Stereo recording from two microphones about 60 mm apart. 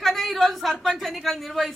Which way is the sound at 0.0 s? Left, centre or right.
Centre.